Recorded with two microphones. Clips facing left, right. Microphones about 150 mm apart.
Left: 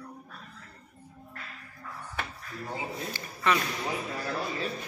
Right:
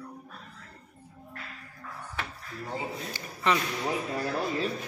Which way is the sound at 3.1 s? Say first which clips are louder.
Even; 15° right (ahead or behind).